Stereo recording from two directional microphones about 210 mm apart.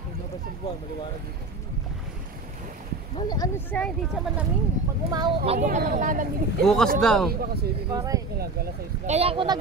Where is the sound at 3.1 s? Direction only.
20° left (ahead or behind).